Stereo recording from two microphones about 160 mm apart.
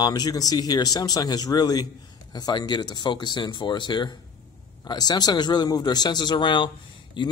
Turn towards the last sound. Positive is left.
turn(degrees=30)  # may be behind; listen again after turning